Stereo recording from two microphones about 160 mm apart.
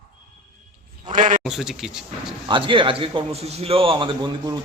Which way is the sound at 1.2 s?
55° right (ahead or behind).